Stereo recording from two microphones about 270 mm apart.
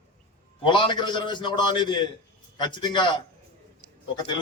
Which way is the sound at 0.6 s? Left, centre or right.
Centre.